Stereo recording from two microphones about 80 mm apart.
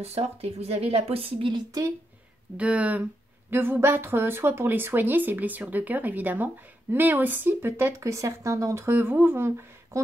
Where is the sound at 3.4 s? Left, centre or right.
Right.